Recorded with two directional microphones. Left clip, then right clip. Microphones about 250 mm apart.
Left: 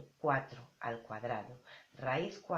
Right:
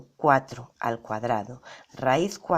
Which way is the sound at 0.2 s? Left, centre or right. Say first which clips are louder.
Right 13 dB; right.